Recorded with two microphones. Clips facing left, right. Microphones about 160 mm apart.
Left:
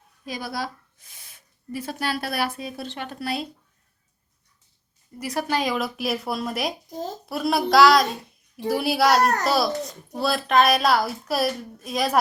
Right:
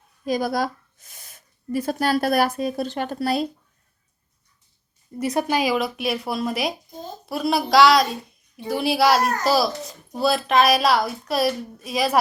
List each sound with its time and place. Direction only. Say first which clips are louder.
0.3 s speech: right 8 dB; 45° right (ahead or behind)
5.2 s a child's voice: right 4 dB; 20° right (ahead or behind); by 12.2 s centre (ahead or behind)